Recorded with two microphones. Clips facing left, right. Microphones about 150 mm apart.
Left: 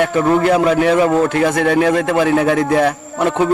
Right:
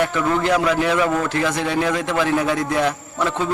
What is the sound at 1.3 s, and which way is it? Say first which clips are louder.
A man's voice: left 7 dB; 55° left (ahead or behind).